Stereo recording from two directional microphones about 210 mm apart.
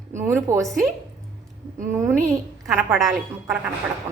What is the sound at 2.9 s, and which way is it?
Speech, centre (ahead or behind).